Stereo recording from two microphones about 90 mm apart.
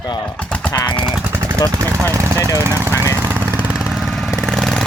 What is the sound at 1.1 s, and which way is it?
Gunshot, 20° right (ahead or behind).